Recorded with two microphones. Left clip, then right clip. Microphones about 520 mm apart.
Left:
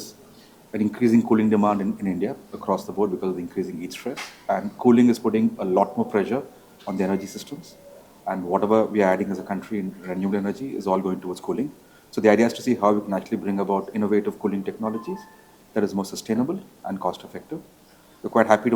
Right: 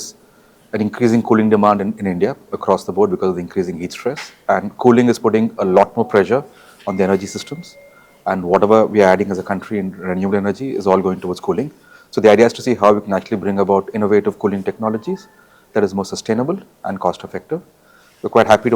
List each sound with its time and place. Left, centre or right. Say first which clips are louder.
0.7 s speech: right 5 dB; centre